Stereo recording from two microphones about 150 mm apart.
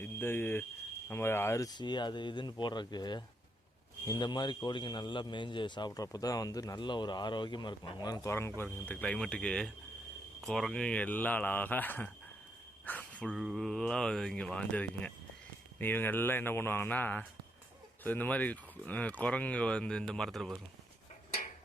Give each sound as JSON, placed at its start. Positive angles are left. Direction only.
{"t": 0.0, "sound": "speech", "side_deg": 15}